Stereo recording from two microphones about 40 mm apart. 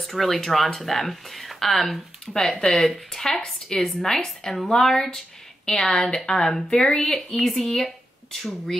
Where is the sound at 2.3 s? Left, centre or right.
Centre.